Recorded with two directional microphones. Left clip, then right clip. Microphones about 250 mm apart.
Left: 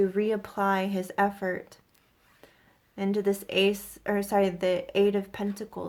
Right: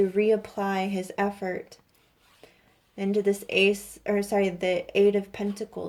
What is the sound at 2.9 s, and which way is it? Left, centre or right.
Speech, centre.